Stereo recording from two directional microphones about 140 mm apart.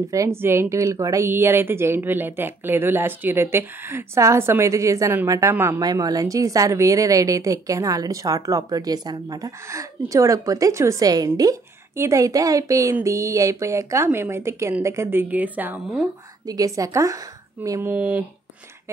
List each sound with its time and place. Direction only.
0.1 s speech: 20° right (ahead or behind)
5.8 s a woman's voice: 25° right (ahead or behind); by 16.1 s 10° right (ahead or behind)
16.4 s a woman's voice: 25° right (ahead or behind); by 18.2 s 10° right (ahead or behind)